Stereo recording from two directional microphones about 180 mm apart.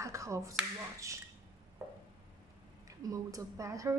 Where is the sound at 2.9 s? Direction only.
20° right (ahead or behind).